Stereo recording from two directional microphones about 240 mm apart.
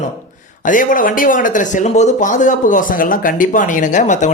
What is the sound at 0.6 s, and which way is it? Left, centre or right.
Speech, left.